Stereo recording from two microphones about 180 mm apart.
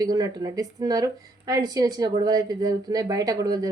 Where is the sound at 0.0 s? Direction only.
20° right (ahead or behind).